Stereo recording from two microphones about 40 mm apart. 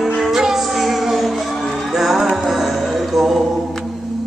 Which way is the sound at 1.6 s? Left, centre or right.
Centre.